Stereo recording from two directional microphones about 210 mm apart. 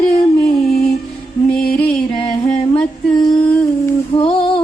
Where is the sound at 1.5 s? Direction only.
5° left (ahead or behind).